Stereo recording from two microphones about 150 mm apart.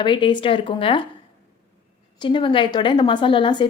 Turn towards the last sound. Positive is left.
turn(degrees=30)  # may be behind; listen again after turning